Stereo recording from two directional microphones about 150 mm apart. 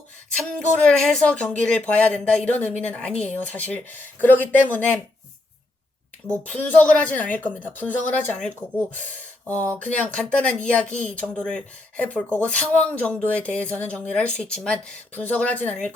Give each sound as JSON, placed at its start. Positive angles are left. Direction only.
{"t": 0.3, "sound": "speech", "side_deg": 5}
{"t": 6.2, "sound": "speech", "side_deg": 10}